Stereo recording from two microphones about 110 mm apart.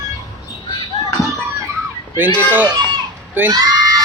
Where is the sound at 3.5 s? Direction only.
35° right (ahead or behind).